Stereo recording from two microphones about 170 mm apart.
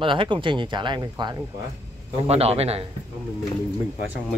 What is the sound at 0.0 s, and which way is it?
Speech, 30° right (ahead or behind).